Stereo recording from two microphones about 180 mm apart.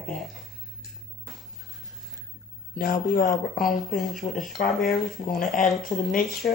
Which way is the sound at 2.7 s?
50° left (ahead or behind).